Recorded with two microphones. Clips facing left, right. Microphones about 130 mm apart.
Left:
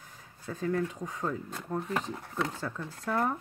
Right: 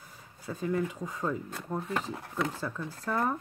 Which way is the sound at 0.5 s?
10° right (ahead or behind).